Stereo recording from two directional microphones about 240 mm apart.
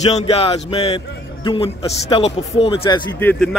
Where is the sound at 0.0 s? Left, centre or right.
Left.